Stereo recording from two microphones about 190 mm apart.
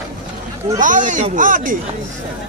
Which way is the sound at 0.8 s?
40° right (ahead or behind).